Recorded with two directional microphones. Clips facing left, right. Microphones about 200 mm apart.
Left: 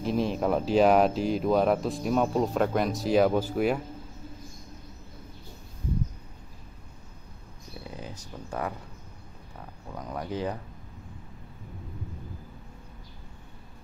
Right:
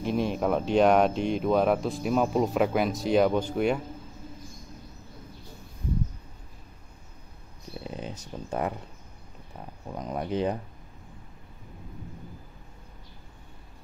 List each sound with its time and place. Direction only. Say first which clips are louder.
0.0 s speech: even; centre (ahead or behind)
7.8 s speech: right 4 dB; 20° right (ahead or behind)
9.8 s speech: right 3 dB; 20° right (ahead or behind)